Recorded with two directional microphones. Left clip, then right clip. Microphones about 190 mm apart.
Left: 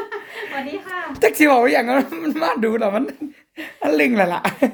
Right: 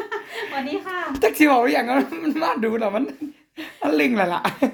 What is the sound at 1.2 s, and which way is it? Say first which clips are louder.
Speech: left 3 dB; 25° left (ahead or behind).